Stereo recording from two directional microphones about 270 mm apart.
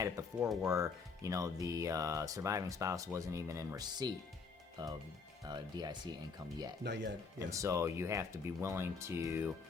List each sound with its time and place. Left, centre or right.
0.6 s speech: centre
6.8 s speech: right
7.3 s speech: centre